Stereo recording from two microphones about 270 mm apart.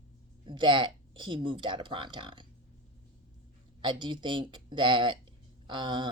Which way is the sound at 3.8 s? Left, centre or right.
Centre.